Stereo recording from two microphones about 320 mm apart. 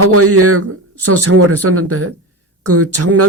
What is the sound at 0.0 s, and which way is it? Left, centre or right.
Speech, right.